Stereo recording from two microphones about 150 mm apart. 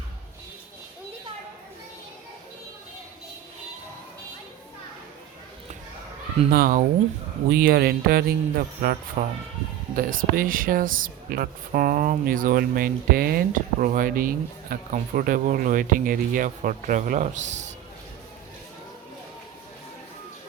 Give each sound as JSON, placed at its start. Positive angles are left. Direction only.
{"t": 6.5, "sound": "speech", "side_deg": -70}
{"t": 7.5, "sound": "speech", "side_deg": -85}
{"t": 9.9, "sound": "speech", "side_deg": -70}